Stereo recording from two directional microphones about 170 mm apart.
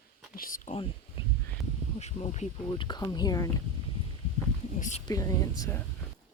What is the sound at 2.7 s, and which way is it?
Speech, 25° left (ahead or behind).